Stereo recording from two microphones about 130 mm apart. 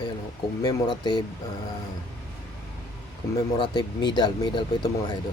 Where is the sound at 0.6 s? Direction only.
30° left (ahead or behind).